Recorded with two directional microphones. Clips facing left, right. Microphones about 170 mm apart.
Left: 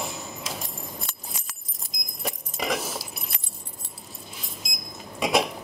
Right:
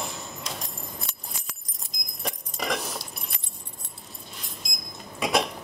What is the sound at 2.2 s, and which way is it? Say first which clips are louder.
Chink: left 2 dB; centre (ahead or behind).